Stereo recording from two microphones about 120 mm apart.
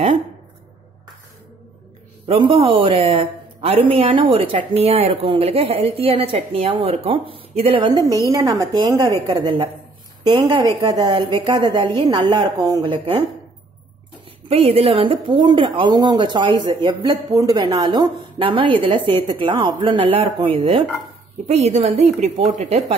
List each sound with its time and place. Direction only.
2.2 s a woman's voice: 45° right (ahead or behind)
7.8 s a woman's voice: 35° right (ahead or behind)
10.8 s a woman's voice: 35° right (ahead or behind)
12.8 s speech: 45° right (ahead or behind)
14.5 s a woman's voice: 55° right (ahead or behind)
17.3 s a woman's voice: 30° right (ahead or behind)
17.6 s speech: 40° right (ahead or behind)
21.5 s a woman's voice: 60° right (ahead or behind)